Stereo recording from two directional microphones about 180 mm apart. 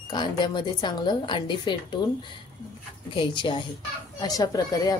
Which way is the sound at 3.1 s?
25° left (ahead or behind).